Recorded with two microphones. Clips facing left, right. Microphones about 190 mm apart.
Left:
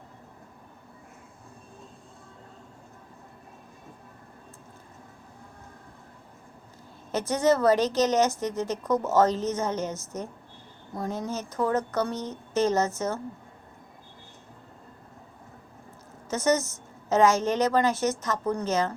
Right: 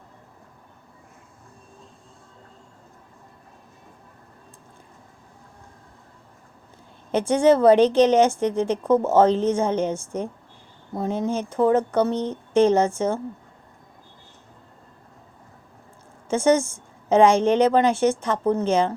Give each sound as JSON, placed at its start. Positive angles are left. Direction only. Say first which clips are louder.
{"t": 7.2, "sound": "a woman's voice", "louder": "right 6 dB", "side_deg": -30}
{"t": 16.3, "sound": "a woman's voice", "louder": "right 6 dB", "side_deg": -30}